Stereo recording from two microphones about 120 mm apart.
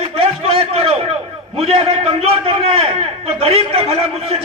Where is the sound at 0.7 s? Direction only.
55° right (ahead or behind).